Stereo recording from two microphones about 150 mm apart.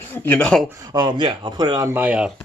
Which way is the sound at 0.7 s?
25° right (ahead or behind).